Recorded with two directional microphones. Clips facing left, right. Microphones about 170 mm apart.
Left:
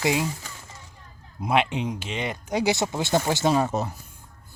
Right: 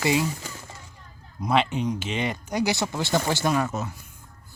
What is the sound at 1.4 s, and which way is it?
Speech, 20° left (ahead or behind).